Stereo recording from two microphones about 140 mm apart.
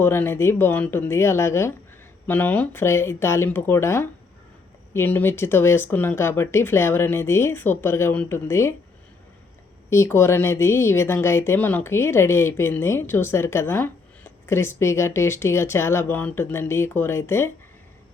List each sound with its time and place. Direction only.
0.0 s speech: 15° left (ahead or behind)
9.9 s speech: 20° left (ahead or behind)